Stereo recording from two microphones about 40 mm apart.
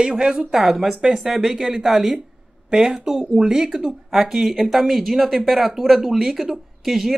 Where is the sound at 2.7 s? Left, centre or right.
Centre.